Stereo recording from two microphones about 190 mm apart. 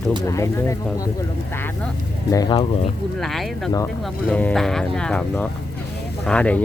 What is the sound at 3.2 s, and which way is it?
Speech, centre (ahead or behind).